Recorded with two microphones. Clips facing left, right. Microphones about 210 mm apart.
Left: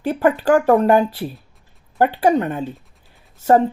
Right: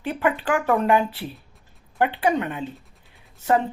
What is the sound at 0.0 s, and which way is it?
Speech, 40° left (ahead or behind).